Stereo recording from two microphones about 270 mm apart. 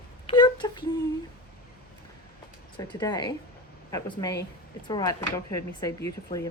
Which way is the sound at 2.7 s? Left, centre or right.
Centre.